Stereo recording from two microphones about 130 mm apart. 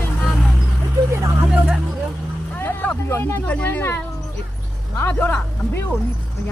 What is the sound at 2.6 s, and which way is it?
Speech, 15° left (ahead or behind).